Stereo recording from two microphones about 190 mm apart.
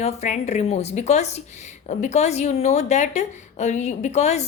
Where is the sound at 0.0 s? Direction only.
35° left (ahead or behind).